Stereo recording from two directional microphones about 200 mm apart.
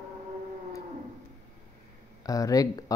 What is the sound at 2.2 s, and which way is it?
Speech, 15° left (ahead or behind).